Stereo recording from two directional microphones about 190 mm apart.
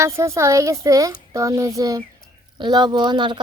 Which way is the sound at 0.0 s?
15° right (ahead or behind).